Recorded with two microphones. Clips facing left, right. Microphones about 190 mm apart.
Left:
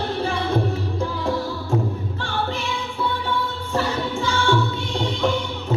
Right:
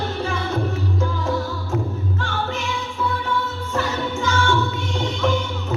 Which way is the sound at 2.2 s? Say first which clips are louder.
Left 1 dB; 35° left (ahead or behind).